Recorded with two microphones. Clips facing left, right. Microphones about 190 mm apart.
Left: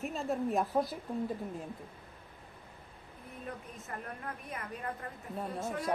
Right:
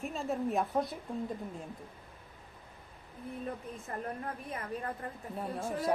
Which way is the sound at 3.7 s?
30° right (ahead or behind).